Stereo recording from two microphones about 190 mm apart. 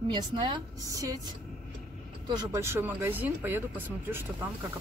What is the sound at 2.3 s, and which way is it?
Speech, 15° right (ahead or behind).